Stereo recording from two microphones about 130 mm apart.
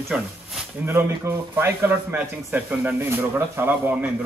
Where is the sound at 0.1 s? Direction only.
5° right (ahead or behind).